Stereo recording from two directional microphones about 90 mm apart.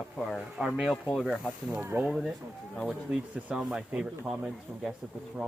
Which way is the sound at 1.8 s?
25° right (ahead or behind).